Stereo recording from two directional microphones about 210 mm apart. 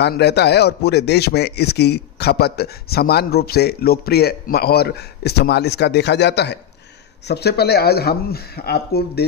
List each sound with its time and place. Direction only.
0.0 s speech: 50° left (ahead or behind)